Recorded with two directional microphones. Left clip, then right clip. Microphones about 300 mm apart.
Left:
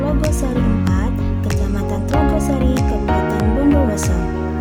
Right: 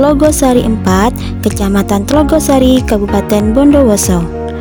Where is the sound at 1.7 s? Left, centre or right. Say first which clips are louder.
Right 10 dB; right.